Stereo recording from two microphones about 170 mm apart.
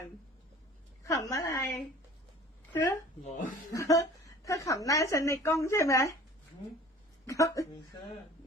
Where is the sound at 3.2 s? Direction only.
45° left (ahead or behind).